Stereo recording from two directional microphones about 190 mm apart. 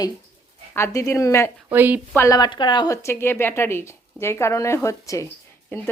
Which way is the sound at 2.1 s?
15° left (ahead or behind).